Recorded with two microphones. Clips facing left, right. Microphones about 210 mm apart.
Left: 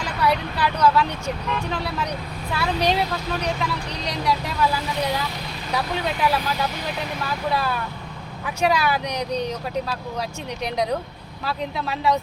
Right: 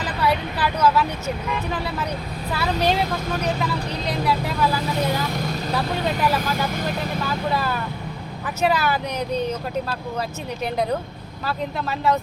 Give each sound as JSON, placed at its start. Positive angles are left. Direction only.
{"t": 0.0, "sound": "speech", "side_deg": -5}
{"t": 5.2, "sound": "speech", "side_deg": -50}
{"t": 5.7, "sound": "speech", "side_deg": 0}